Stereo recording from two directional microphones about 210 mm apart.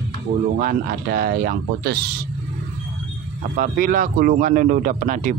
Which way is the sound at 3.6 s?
45° right (ahead or behind).